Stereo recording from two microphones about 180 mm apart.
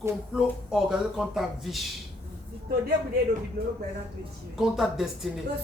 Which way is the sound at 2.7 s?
60° right (ahead or behind).